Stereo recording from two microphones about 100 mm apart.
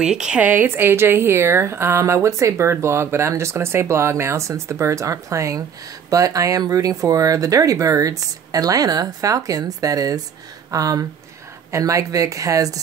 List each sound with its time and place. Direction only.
0.0 s a woman's voice: 10° right (ahead or behind); by 12.8 s 35° right (ahead or behind)